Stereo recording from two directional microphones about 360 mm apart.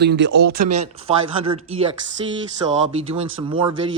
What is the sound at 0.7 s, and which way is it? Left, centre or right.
Speech, centre.